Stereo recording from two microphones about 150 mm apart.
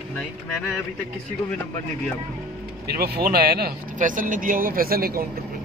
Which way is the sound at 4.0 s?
60° right (ahead or behind).